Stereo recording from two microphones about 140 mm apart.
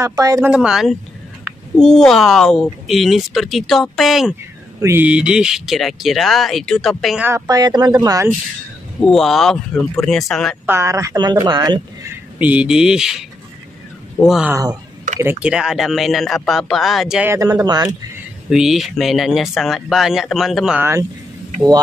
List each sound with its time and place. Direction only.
0.0 s a woman's voice: 25° right (ahead or behind)
0.4 s speech: 5° right (ahead or behind)
4.7 s speech: 20° right (ahead or behind)
5.0 s speech: 5° right (ahead or behind)
7.2 s a woman's voice: 25° right (ahead or behind)
9.0 s speech: centre (ahead or behind)
10.7 s a woman's voice: 20° right (ahead or behind)
12.4 s speech: 10° right (ahead or behind)
14.2 s speech: 5° right (ahead or behind)
14.5 s a woman's voice: 25° right (ahead or behind)
15.4 s speech: 5° right (ahead or behind)
17.2 s a woman's voice: 20° right (ahead or behind)
18.5 s speech: 5° right (ahead or behind)